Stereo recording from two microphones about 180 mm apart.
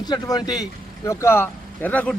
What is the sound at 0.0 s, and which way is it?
A man's voice, 20° left (ahead or behind).